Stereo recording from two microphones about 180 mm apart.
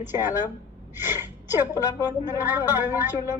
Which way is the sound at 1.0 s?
10° right (ahead or behind).